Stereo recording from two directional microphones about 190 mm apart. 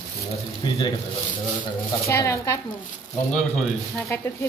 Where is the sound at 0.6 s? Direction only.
25° left (ahead or behind).